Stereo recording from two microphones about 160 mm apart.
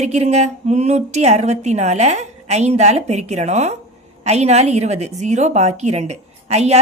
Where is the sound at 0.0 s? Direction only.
45° right (ahead or behind).